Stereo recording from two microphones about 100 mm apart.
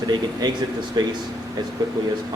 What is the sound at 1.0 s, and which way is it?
Speech, 45° right (ahead or behind).